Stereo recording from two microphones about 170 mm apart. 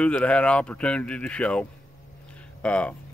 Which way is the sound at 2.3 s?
5° left (ahead or behind).